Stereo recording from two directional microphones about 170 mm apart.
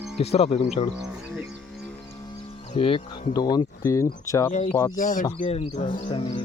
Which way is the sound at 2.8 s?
30° left (ahead or behind).